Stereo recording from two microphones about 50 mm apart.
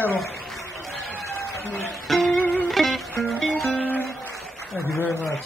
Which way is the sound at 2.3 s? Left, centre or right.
Left.